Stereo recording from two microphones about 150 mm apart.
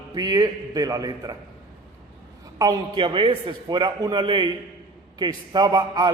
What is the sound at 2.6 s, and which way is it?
A man's voice, 30° right (ahead or behind).